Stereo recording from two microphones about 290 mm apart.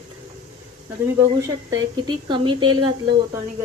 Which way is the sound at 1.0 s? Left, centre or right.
Centre.